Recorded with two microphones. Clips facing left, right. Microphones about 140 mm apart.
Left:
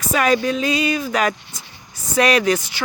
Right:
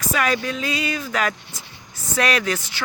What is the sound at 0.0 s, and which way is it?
Speech, 20° left (ahead or behind).